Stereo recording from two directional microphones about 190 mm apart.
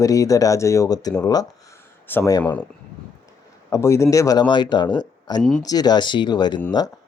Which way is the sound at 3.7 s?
15° left (ahead or behind).